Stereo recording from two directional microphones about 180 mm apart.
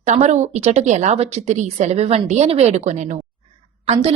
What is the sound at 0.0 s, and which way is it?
A woman's voice, 40° right (ahead or behind).